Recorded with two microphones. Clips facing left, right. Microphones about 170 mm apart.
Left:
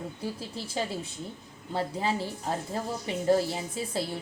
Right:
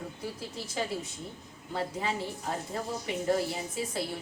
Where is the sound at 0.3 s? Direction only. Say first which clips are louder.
Left 2 dB; 30° left (ahead or behind).